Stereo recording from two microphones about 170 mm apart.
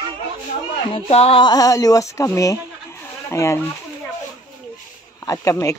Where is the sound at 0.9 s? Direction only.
35° left (ahead or behind); by 3.6 s 15° left (ahead or behind).